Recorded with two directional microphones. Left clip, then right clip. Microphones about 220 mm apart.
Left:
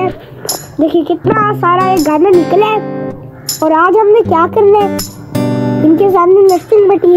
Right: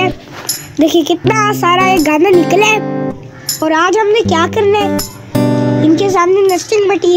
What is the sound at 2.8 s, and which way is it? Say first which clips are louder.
Music: right 1 dB; centre (ahead or behind).